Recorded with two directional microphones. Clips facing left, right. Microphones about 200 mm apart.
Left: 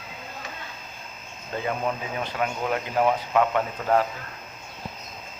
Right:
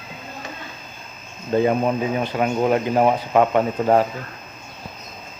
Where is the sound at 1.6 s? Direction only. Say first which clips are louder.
Right 6 dB; 25° right (ahead or behind).